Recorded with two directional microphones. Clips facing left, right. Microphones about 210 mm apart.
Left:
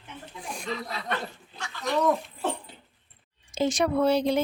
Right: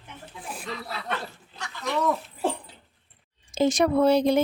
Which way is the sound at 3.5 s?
40° right (ahead or behind).